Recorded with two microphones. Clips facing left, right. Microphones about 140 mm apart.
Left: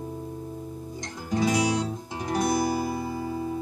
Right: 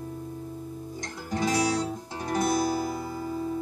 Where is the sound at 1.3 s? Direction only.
15° left (ahead or behind).